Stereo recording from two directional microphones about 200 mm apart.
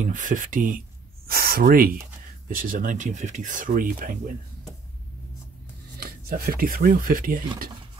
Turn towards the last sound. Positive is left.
turn(degrees=-45)  # may be behind; listen again after turning